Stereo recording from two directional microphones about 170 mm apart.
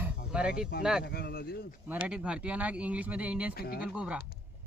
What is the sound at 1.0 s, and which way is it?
Speech, 70° left (ahead or behind).